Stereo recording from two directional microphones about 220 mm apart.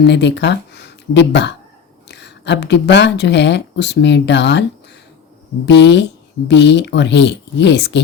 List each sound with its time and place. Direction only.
0.0 s speech: 50° left (ahead or behind)
5.6 s speech: 50° left (ahead or behind)